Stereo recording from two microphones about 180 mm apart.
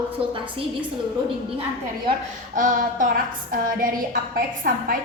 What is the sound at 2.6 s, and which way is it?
A woman's voice, 50° right (ahead or behind).